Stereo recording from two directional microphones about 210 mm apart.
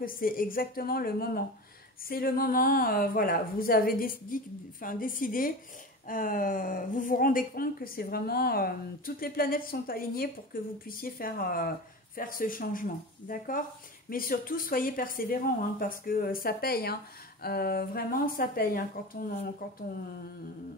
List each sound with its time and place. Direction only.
0.0 s a woman's voice: 40° left (ahead or behind)